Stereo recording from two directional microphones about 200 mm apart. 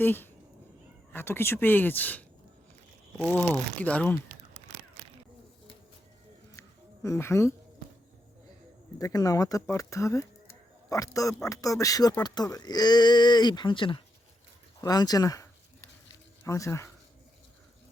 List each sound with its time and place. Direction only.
0.0 s speech: 10° left (ahead or behind)
6.6 s a sound: 15° left (ahead or behind)
9.0 s speech: 15° left (ahead or behind)